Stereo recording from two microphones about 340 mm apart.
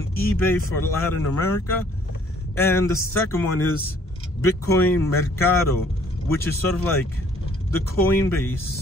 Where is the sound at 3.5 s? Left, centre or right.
Left.